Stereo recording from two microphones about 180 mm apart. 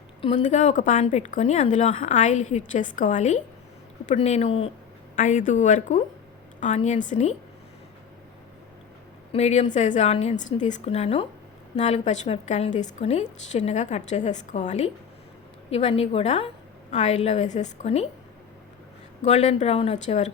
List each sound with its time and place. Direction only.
0.2 s a woman's voice: 40° left (ahead or behind)
9.3 s speech: 40° left (ahead or behind)
19.2 s speech: 40° left (ahead or behind)